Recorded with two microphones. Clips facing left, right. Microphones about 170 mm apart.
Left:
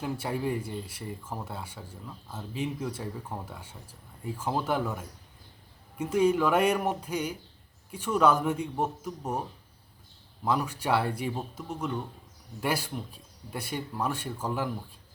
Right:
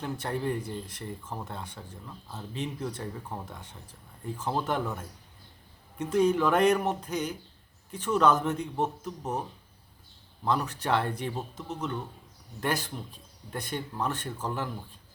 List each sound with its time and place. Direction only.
0.0 s speech: 5° left (ahead or behind)
10.4 s speech: 10° left (ahead or behind)